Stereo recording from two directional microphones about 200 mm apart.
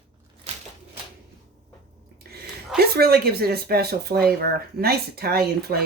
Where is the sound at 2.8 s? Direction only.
50° right (ahead or behind).